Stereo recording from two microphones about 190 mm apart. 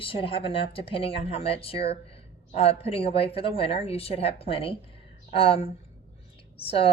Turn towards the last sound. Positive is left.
turn(degrees=30)  # may be behind; listen again after turning